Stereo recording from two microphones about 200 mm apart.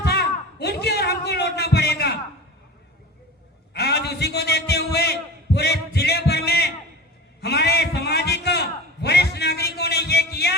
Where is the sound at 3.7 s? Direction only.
55° left (ahead or behind).